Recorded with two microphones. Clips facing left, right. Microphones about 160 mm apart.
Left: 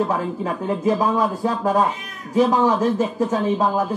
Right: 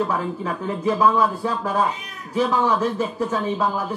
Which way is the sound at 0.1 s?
40° left (ahead or behind).